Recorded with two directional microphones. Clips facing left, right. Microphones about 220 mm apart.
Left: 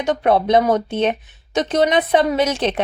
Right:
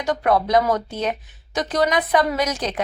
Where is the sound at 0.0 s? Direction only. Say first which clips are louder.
Left 3 dB; 25° left (ahead or behind).